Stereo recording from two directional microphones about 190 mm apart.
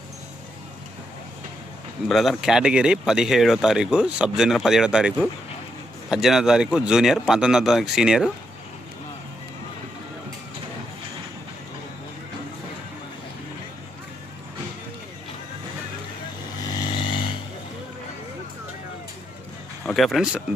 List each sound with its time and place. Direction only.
2.0 s speech: centre (ahead or behind)
16.7 s vehicle: 25° left (ahead or behind)
19.8 s speech: centre (ahead or behind)